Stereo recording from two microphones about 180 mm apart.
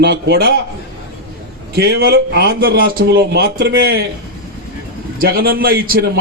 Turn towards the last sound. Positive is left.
turn(degrees=-55)  # may be behind; listen again after turning